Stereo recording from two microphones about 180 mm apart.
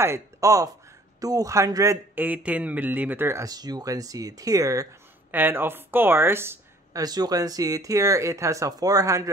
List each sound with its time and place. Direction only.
0.0 s a man's voice: 15° right (ahead or behind)